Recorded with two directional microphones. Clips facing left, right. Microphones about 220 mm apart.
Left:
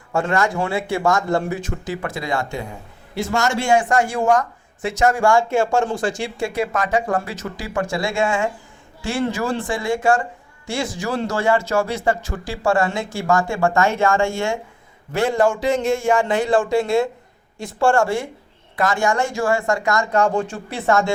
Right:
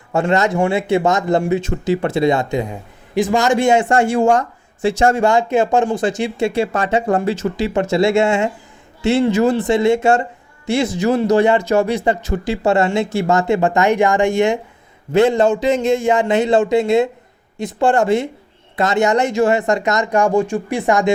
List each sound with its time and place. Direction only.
0.1 s speech: 20° right (ahead or behind)